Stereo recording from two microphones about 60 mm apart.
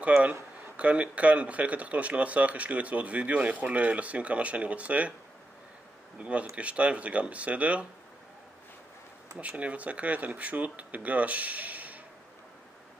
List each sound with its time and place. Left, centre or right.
0.2 s speech: right
6.1 s speech: right
9.4 s speech: right